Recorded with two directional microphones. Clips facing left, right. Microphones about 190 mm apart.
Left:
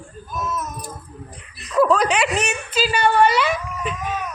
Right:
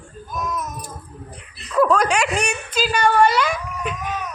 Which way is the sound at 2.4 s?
5° left (ahead or behind).